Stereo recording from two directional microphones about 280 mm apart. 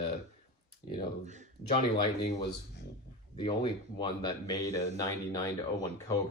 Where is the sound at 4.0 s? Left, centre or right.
Centre.